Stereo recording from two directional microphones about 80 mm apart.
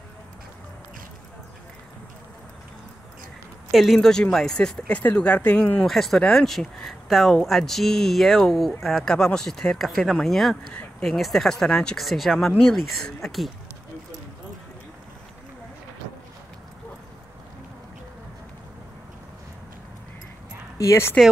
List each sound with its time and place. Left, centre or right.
3.7 s speech: centre
5.9 s speech: centre
20.7 s speech: left